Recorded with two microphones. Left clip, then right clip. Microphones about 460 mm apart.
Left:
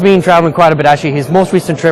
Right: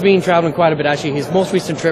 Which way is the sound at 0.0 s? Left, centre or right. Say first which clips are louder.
Left 5 dB; left.